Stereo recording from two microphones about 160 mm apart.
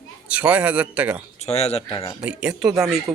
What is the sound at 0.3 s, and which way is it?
Speech, 10° right (ahead or behind).